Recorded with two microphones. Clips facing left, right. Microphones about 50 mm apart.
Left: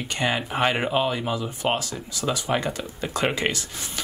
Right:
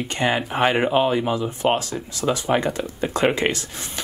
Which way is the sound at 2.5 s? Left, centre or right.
Centre.